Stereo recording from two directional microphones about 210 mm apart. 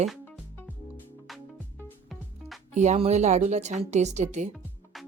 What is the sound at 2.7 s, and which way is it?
Speech, 35° right (ahead or behind).